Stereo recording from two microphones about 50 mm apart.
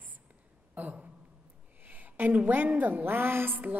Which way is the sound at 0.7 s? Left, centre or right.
Right.